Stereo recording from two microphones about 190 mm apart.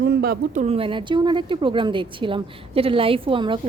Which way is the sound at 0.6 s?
30° right (ahead or behind).